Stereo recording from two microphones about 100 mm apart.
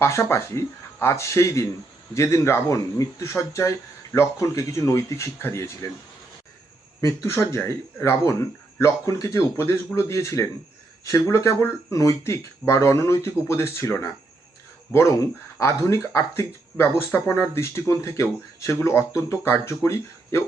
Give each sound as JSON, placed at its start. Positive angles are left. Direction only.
{"t": 0.0, "sound": "speech", "side_deg": 25}
{"t": 7.0, "sound": "speech", "side_deg": 25}